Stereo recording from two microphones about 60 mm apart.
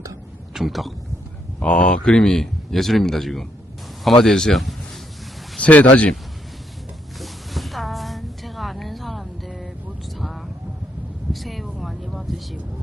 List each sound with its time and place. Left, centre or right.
0.5 s speech: centre
1.5 s speech: left; by 4.7 s centre
5.5 s speech: left
7.2 s a sound: centre